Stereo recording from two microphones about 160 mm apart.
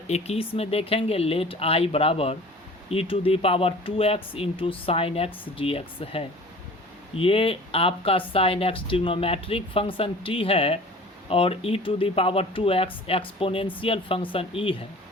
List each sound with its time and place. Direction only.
0.1 s speech: 40° left (ahead or behind)